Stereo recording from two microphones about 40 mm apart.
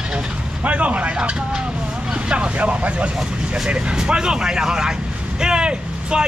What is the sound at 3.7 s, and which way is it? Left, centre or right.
A man's voice, right.